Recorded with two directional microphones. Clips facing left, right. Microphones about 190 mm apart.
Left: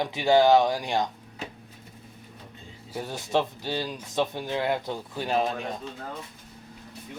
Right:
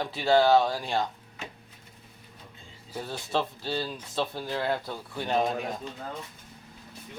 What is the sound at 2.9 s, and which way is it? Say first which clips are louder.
Speech: left 3 dB; 15° left (ahead or behind).